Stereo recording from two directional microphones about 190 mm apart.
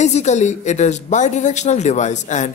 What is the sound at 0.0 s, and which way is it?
Speech, 35° left (ahead or behind).